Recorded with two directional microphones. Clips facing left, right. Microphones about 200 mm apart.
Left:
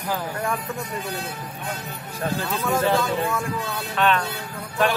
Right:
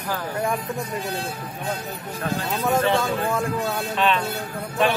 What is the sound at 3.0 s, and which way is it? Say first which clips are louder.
Speech: even; 30° right (ahead or behind).